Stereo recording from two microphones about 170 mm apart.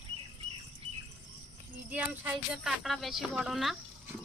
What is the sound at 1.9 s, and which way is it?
Speech, 10° right (ahead or behind).